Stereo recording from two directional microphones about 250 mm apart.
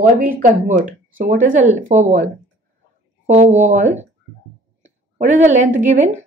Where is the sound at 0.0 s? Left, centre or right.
Right.